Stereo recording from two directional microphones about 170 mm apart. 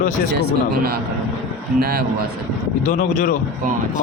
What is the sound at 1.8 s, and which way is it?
Speech, 60° right (ahead or behind).